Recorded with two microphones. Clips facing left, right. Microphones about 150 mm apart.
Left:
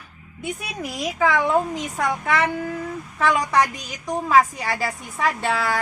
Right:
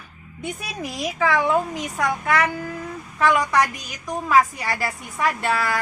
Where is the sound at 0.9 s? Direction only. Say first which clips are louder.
Left 1 dB; 15° left (ahead or behind).